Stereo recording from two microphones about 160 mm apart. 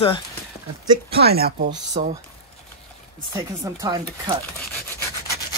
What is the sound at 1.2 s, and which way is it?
Speech, 75° right (ahead or behind).